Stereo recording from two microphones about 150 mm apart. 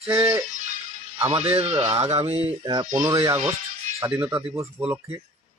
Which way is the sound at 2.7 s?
25° right (ahead or behind).